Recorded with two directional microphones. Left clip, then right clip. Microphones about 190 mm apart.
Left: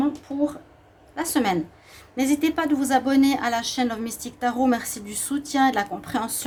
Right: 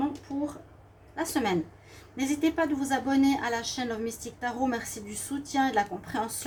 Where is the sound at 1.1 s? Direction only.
50° left (ahead or behind).